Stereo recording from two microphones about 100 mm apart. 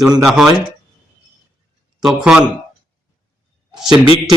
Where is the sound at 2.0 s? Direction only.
5° right (ahead or behind).